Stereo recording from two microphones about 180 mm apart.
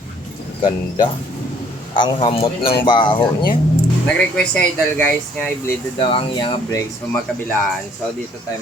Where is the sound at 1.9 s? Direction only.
25° left (ahead or behind).